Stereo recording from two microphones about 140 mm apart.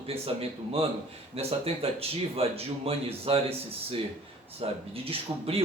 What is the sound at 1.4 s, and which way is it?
Speech, 45° right (ahead or behind).